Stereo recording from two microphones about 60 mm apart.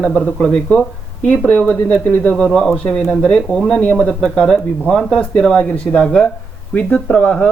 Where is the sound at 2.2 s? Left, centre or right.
Centre.